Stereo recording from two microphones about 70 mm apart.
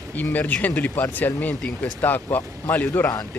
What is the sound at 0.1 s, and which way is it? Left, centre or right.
Speech, left.